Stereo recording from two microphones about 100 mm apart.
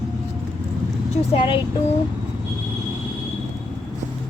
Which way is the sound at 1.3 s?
50° left (ahead or behind).